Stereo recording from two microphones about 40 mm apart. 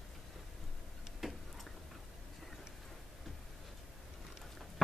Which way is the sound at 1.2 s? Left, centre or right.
Centre.